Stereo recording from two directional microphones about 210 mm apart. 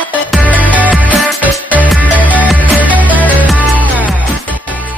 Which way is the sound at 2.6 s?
5° left (ahead or behind).